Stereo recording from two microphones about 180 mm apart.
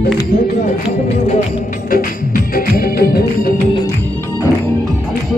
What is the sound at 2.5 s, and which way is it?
Music, 55° left (ahead or behind).